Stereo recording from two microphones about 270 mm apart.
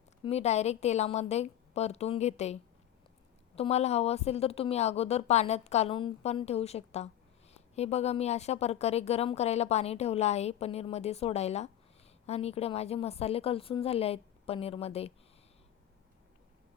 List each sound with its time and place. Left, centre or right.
0.3 s speech: left